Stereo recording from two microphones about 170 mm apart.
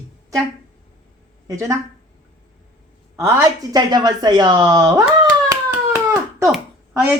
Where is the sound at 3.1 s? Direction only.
20° right (ahead or behind).